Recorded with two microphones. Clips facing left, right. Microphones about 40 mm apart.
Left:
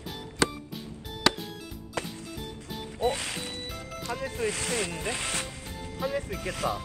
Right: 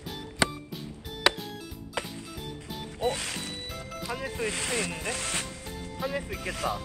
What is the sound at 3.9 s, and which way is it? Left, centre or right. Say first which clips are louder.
Speech: even; centre.